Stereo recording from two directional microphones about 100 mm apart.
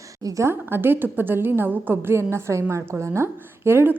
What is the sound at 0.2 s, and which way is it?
Speech, 40° right (ahead or behind).